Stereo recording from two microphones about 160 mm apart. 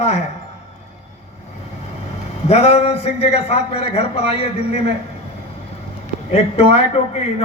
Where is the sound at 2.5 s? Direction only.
40° left (ahead or behind).